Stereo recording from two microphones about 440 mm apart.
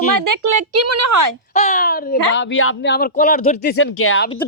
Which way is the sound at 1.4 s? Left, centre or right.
Centre.